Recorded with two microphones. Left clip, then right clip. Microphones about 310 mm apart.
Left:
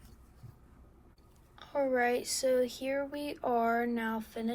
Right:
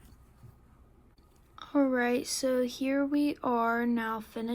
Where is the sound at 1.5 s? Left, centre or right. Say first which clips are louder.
Right 2 dB; right.